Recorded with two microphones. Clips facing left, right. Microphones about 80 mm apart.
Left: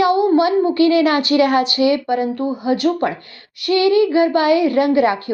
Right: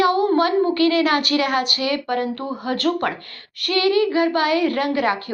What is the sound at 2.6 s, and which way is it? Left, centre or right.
A woman's voice, centre.